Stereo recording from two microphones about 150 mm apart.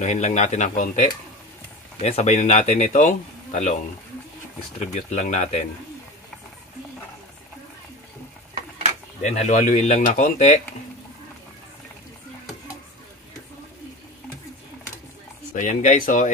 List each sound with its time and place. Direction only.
0.0 s a man's voice: 50° left (ahead or behind)
2.0 s a man's voice: 45° left (ahead or behind)
4.7 s a man's voice: 50° left (ahead or behind)
9.2 s a man's voice: 50° left (ahead or behind)
15.5 s speech: 60° left (ahead or behind)